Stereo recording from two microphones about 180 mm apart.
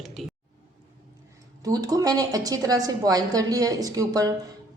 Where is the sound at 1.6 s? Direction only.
20° right (ahead or behind).